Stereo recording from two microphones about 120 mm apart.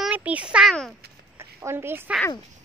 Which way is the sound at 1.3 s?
20° right (ahead or behind).